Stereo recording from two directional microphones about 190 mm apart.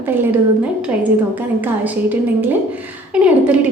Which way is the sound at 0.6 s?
5° right (ahead or behind).